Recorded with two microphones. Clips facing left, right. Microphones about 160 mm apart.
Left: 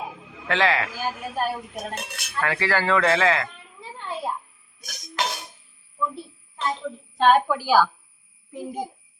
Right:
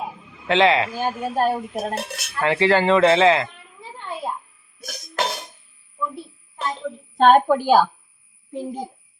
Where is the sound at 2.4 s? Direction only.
25° right (ahead or behind).